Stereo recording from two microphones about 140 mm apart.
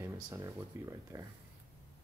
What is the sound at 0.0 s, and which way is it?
Speech, 20° right (ahead or behind).